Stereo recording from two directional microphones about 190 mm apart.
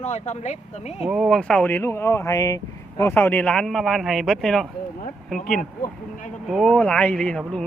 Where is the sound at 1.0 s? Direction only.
5° right (ahead or behind).